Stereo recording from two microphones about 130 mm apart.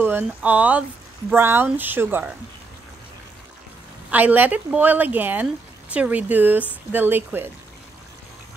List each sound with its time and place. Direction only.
0.0 s speech: 15° right (ahead or behind)
4.1 s speech: 10° right (ahead or behind)